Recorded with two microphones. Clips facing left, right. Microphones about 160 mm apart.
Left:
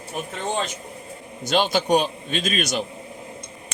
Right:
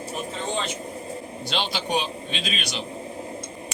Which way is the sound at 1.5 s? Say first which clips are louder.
Left 8 dB; 45° left (ahead or behind).